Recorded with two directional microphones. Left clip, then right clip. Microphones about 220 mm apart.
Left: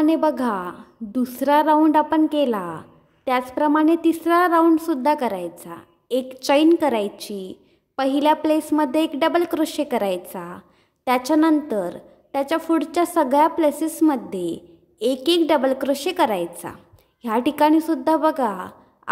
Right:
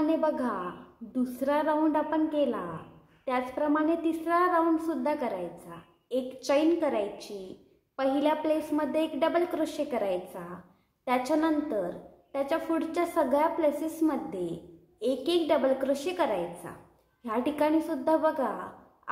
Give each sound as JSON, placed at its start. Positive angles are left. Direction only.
{"t": 0.0, "sound": "a woman's voice", "side_deg": 45}